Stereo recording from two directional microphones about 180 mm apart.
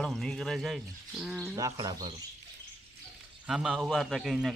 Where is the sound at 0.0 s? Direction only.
Centre (ahead or behind).